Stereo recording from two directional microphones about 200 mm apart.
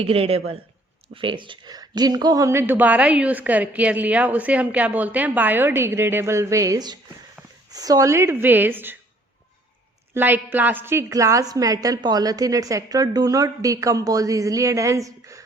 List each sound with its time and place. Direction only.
0.0 s a man's voice: 30° right (ahead or behind); by 9.0 s 10° right (ahead or behind)
10.2 s speech: 10° right (ahead or behind)